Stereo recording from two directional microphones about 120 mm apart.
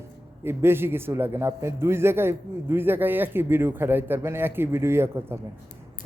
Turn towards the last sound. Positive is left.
turn(degrees=-20)  # may be behind; listen again after turning